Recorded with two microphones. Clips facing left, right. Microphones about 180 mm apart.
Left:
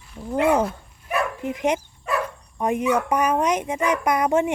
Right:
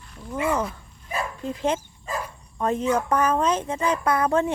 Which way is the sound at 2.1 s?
70° left (ahead or behind).